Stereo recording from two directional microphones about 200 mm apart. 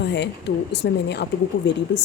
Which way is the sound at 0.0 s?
60° left (ahead or behind).